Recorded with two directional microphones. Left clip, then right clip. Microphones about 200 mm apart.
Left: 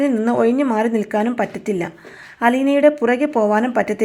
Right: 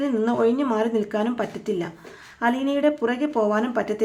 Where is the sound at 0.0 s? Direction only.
25° left (ahead or behind).